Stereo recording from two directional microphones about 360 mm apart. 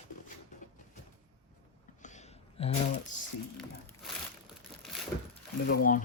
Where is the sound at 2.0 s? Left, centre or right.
Centre.